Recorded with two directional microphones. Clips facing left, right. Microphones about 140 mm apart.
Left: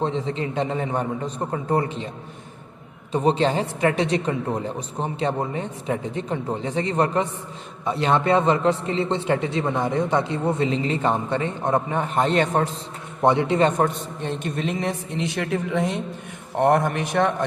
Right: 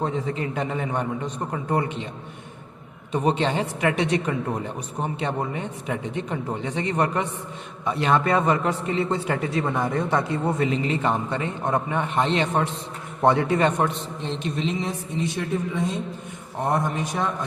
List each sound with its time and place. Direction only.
0.0 s a man's voice: 30° left (ahead or behind)
3.1 s a woman's voice: 35° left (ahead or behind)
13.2 s a man's voice: 20° left (ahead or behind)
14.2 s speech: 50° left (ahead or behind); by 16.0 s 85° left
16.6 s speech: 75° left (ahead or behind)